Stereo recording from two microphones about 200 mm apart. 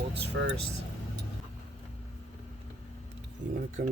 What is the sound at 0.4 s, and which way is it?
Speech, 70° right (ahead or behind).